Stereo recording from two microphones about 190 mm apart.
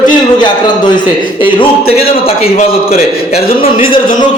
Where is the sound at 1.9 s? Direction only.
30° left (ahead or behind).